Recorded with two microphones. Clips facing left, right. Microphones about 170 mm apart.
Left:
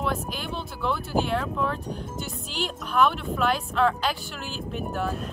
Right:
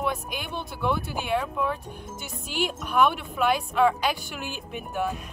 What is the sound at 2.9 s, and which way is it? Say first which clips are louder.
Speech: even; 15° right (ahead or behind).